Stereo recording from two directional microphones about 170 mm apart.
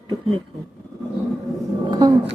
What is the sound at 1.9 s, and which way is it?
Speech, 25° right (ahead or behind).